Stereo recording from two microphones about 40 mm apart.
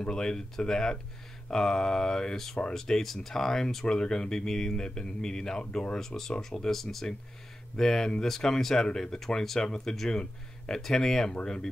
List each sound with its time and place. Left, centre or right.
0.0 s speech: centre